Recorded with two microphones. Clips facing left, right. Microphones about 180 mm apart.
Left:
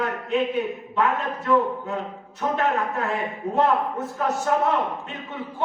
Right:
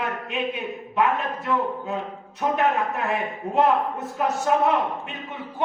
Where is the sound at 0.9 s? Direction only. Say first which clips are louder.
Right 2 dB; 20° right (ahead or behind).